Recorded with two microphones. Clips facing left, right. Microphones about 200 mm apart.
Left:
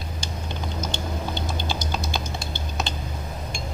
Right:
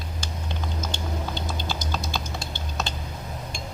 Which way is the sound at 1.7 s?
15° left (ahead or behind).